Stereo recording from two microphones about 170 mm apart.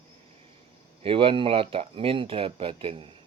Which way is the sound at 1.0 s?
30° right (ahead or behind).